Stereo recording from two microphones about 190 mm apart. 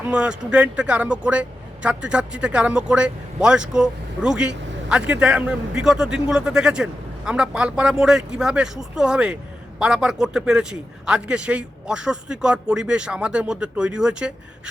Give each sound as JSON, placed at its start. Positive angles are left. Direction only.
{"t": 0.0, "sound": "speech", "side_deg": -5}